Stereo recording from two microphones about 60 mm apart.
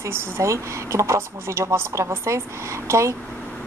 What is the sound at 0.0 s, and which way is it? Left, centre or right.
A woman's voice, right.